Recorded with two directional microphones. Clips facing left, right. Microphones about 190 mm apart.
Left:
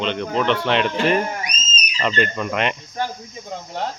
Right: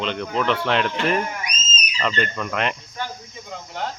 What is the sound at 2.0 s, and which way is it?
Speech, 10° left (ahead or behind).